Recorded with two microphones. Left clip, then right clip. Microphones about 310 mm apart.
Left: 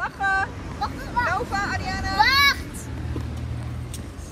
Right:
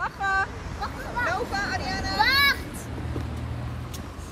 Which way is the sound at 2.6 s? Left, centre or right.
Right.